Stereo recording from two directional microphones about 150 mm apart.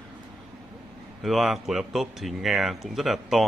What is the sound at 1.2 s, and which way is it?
Speech, centre (ahead or behind).